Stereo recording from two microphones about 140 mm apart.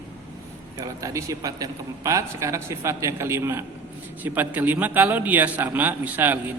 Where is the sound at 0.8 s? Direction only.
25° right (ahead or behind).